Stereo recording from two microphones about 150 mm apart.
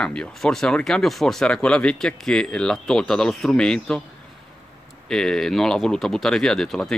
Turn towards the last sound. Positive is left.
turn(degrees=5)  # may be behind; listen again after turning